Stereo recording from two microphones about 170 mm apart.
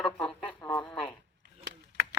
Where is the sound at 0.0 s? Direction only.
5° left (ahead or behind).